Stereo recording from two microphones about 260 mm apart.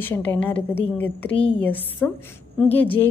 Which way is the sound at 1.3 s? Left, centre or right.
Left.